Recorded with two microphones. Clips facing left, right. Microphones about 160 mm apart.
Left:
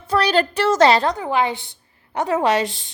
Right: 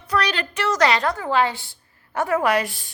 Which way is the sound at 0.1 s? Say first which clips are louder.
Left 6 dB; 30° left (ahead or behind).